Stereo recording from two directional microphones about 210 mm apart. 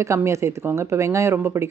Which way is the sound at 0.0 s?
15° right (ahead or behind).